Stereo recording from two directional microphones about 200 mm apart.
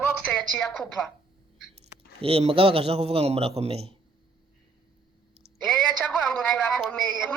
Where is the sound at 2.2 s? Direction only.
30° right (ahead or behind).